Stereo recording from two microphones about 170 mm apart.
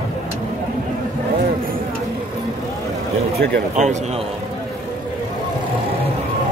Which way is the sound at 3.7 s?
45° right (ahead or behind).